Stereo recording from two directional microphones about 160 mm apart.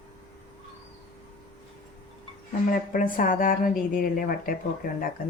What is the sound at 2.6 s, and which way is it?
Speech, 60° left (ahead or behind).